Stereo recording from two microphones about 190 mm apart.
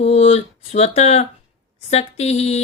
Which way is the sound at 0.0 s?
35° left (ahead or behind).